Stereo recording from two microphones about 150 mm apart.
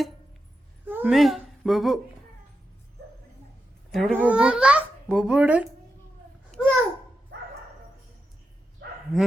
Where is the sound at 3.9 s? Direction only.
Centre (ahead or behind).